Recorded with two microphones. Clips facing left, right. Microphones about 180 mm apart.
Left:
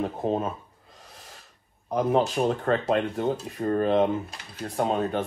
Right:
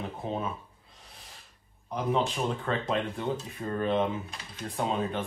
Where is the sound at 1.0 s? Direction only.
45° left (ahead or behind).